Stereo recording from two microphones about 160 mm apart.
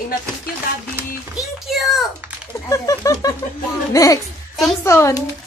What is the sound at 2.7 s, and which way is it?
Speech, 20° left (ahead or behind).